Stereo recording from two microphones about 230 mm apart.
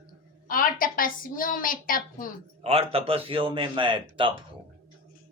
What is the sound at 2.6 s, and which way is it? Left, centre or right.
Speech, right.